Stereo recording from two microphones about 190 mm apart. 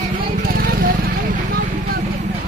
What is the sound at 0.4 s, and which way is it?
Vehicle, 50° right (ahead or behind).